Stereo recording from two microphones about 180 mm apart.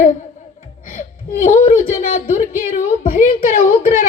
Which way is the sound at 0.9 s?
45° left (ahead or behind).